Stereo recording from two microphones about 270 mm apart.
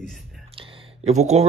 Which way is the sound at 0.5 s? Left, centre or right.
Centre.